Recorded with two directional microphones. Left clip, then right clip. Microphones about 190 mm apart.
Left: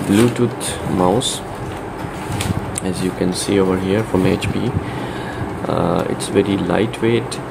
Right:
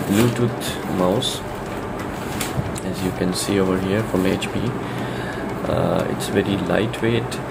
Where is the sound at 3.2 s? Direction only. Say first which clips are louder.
Left 4 dB; 10° left (ahead or behind).